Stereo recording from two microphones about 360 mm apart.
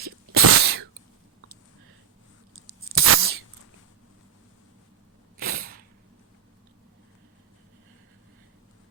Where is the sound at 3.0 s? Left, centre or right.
Right.